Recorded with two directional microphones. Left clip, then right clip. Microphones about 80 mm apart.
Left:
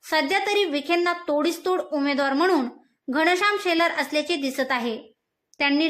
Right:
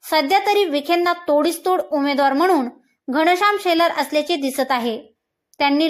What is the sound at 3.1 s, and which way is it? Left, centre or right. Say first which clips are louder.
A woman's voice: right 5 dB; right.